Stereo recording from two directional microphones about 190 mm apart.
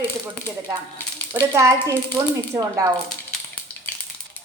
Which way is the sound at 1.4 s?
15° right (ahead or behind).